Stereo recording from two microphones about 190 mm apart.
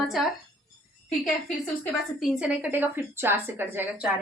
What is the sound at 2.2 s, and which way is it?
A woman's voice, 5° right (ahead or behind).